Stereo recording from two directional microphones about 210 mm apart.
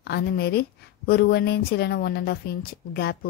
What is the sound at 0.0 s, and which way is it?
A woman's voice, 50° left (ahead or behind).